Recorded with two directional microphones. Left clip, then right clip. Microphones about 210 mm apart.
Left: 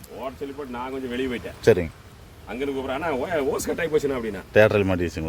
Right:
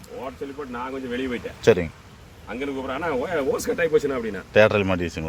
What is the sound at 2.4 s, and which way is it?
Speech, 40° left (ahead or behind).